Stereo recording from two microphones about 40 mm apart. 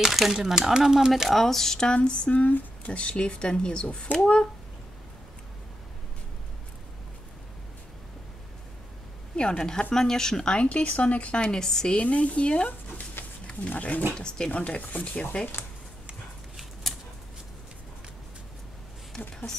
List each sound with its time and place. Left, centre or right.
0.0 s speech: centre
1.3 s speech: centre; by 2.3 s left
2.3 s speech: left
9.4 s speech: left
10.5 s speech: left
11.3 s speech: left
12.0 s speech: left
13.2 s wild animals: left
13.5 s speech: left
14.1 s speech: centre
14.5 s speech: left